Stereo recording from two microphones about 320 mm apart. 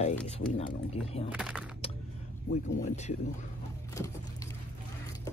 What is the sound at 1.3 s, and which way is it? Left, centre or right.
Speech, centre.